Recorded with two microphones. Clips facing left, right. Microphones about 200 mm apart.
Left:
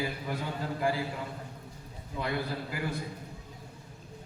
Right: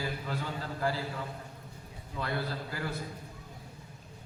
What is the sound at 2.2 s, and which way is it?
Speech, 15° left (ahead or behind).